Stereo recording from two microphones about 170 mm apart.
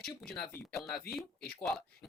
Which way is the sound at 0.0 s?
5° left (ahead or behind).